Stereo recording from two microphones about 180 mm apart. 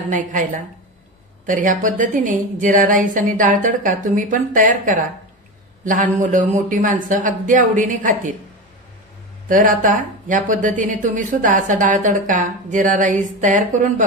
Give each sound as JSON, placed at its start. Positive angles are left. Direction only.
{"t": 0.1, "sound": "speech", "side_deg": -45}
{"t": 9.5, "sound": "speech", "side_deg": -50}